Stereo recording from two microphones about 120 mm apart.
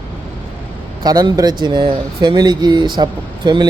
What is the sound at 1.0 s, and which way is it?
Speech, 30° right (ahead or behind).